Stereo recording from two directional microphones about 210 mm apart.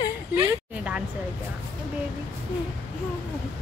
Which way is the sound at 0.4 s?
5° right (ahead or behind).